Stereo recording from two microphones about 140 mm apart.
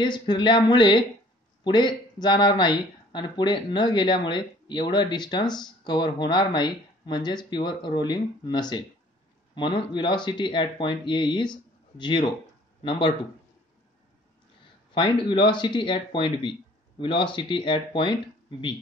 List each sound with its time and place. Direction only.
0.0 s speech: 35° left (ahead or behind)
14.9 s speech: 35° left (ahead or behind)